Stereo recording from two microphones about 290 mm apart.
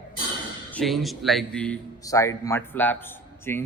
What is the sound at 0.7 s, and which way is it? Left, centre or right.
A man's voice, centre.